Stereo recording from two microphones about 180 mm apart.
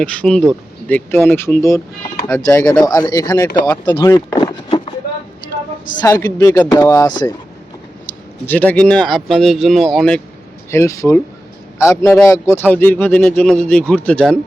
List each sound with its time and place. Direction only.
0.0 s speech: 5° left (ahead or behind)
4.4 s a sound: 30° left (ahead or behind)
6.0 s speech: 20° left (ahead or behind)
8.4 s speech: 10° left (ahead or behind)
10.7 s speech: 15° left (ahead or behind)